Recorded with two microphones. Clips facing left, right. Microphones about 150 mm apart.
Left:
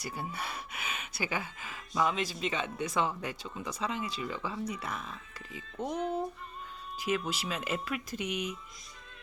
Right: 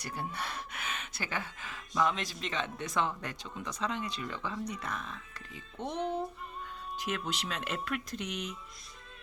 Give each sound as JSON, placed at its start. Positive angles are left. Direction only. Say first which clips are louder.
{"t": 0.0, "sound": "speech", "louder": "even", "side_deg": 5}